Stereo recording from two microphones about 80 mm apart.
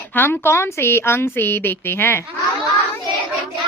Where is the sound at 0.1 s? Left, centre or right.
Left.